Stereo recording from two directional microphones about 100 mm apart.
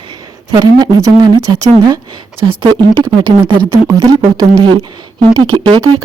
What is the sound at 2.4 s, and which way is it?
Speech, 50° right (ahead or behind).